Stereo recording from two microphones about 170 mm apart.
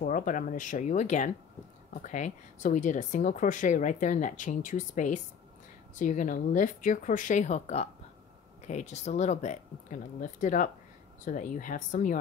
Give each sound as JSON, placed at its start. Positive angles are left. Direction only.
{"t": 0.0, "sound": "speech", "side_deg": 50}